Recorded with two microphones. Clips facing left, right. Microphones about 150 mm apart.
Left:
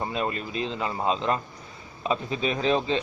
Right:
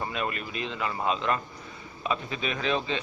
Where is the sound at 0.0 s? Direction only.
30° left (ahead or behind).